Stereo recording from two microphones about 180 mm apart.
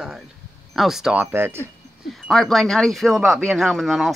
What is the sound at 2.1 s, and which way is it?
Speech, centre (ahead or behind).